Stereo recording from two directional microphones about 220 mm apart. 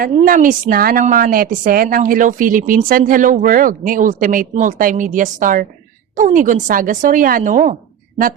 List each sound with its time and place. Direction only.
0.0 s a woman's voice: 40° right (ahead or behind)